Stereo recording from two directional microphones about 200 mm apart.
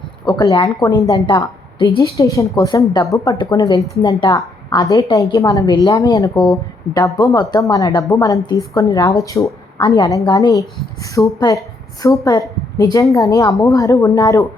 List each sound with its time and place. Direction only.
0.3 s a woman's voice: 20° left (ahead or behind)